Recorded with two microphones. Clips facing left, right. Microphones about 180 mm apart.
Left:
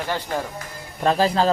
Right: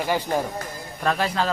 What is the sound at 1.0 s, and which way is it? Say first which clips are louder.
Speech: left 5 dB; 30° left (ahead or behind).